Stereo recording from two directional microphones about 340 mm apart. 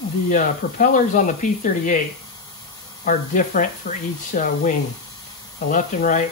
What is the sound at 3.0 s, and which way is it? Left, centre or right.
Speech, left.